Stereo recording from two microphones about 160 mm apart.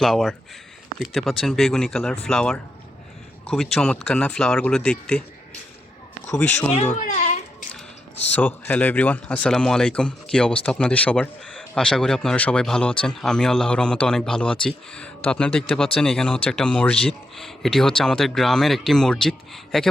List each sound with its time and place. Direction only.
0.0 s speech: centre (ahead or behind)
6.3 s speech: 10° left (ahead or behind)
7.0 s a child's voice: 50° left (ahead or behind)
8.4 s speech: 10° left (ahead or behind)